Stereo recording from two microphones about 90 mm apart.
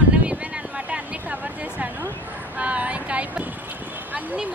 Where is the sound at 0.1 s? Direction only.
10° right (ahead or behind).